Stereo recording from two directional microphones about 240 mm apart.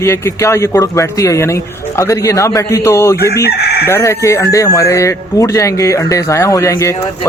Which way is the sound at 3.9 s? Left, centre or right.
Centre.